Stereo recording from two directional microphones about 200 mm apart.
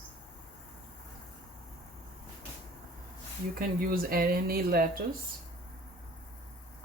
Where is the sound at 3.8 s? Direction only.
45° right (ahead or behind).